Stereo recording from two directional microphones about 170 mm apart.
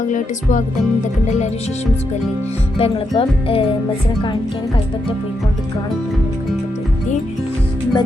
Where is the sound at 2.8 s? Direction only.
35° left (ahead or behind).